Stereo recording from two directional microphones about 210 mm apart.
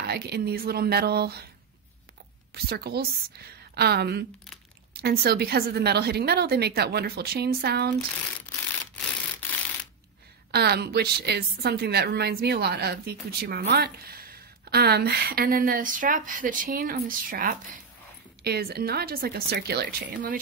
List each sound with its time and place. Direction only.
0.0 s a woman's voice: 50° right (ahead or behind)
2.5 s a woman's voice: 50° right (ahead or behind)
10.5 s a woman's voice: 50° right (ahead or behind)